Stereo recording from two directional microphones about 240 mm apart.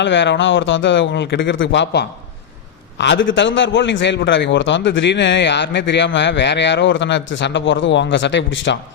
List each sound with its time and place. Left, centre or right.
0.0 s a man's voice: left